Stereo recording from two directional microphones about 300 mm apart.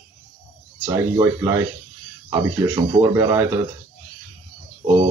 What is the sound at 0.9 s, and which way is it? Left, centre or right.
Speech, centre.